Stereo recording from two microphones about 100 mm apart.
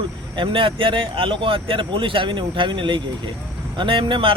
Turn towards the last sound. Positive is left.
turn(degrees=-60)  # may be behind; listen again after turning